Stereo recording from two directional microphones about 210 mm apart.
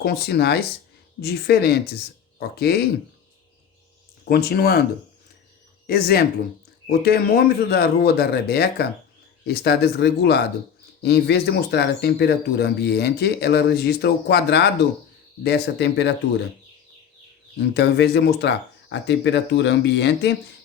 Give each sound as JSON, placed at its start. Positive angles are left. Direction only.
{"t": 0.0, "sound": "speech", "side_deg": 50}
{"t": 4.3, "sound": "speech", "side_deg": 45}
{"t": 5.9, "sound": "speech", "side_deg": 45}
{"t": 17.7, "sound": "speech", "side_deg": 55}